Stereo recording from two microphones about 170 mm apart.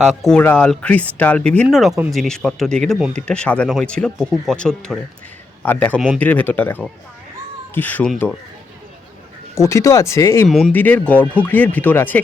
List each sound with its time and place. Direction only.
0.0 s speech: centre (ahead or behind)
9.6 s speech: 20° left (ahead or behind)